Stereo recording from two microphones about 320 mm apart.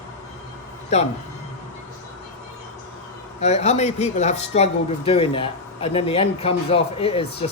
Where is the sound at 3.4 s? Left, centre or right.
Left.